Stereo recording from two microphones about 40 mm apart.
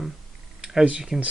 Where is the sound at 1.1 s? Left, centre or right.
Centre.